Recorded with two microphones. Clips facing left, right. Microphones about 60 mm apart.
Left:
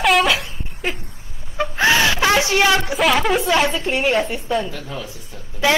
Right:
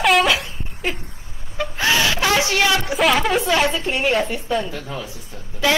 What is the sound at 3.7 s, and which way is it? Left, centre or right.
Speech, centre.